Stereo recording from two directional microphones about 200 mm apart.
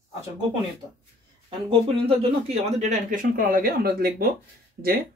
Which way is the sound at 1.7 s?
30° right (ahead or behind).